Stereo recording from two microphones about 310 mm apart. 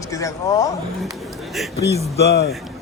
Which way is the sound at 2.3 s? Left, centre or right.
Left.